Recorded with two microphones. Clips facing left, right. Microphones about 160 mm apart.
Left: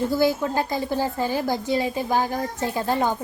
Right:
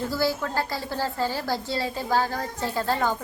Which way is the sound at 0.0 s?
20° left (ahead or behind).